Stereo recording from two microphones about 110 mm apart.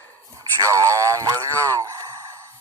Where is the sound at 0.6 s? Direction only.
30° right (ahead or behind).